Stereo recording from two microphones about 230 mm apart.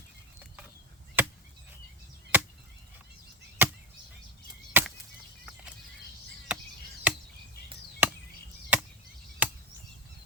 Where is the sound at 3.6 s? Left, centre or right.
Centre.